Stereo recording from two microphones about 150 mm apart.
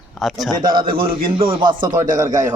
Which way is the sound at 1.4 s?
35° right (ahead or behind).